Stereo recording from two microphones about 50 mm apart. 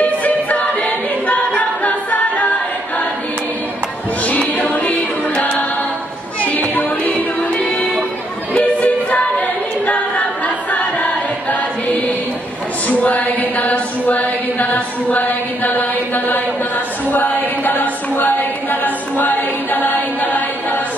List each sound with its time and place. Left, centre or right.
0.0 s a capella: left
4.2 s music: left
6.7 s music: left
9.8 s a capella: left
12.8 s a sound: left